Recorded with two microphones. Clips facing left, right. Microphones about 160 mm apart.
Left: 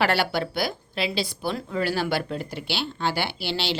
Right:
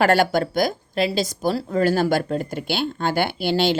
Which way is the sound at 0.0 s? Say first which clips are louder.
Right 6 dB; 45° right (ahead or behind).